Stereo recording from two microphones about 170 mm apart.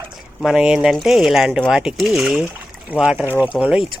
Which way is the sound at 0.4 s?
5° right (ahead or behind).